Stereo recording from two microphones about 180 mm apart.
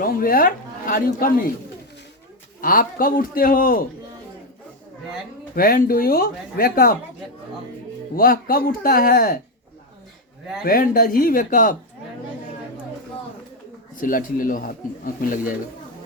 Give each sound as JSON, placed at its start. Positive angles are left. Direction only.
{"t": 0.0, "sound": "speech", "side_deg": 55}
{"t": 2.6, "sound": "speech", "side_deg": 50}
{"t": 5.5, "sound": "speech", "side_deg": 50}
{"t": 8.1, "sound": "speech", "side_deg": 50}
{"t": 10.6, "sound": "speech", "side_deg": 55}
{"t": 13.9, "sound": "speech", "side_deg": 50}